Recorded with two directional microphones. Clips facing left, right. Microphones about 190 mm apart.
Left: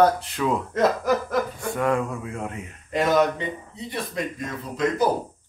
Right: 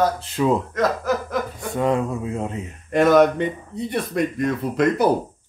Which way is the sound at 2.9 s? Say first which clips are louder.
Right 6 dB; 55° right (ahead or behind).